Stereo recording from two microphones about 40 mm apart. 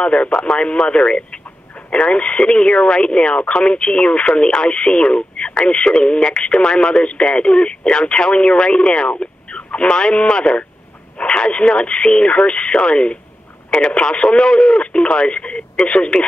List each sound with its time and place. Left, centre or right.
0.0 s speech: left